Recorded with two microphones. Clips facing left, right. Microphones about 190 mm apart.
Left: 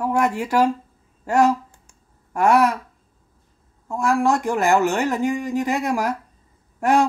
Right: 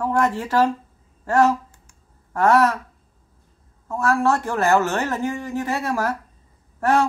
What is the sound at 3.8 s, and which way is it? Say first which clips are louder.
A man's voice: even; 15° left (ahead or behind).